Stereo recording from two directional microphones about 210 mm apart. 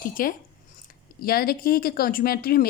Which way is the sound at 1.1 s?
45° left (ahead or behind).